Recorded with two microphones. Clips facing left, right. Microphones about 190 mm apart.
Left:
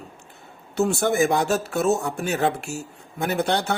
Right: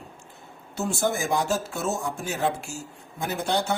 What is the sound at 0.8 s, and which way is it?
Speech, 65° left (ahead or behind).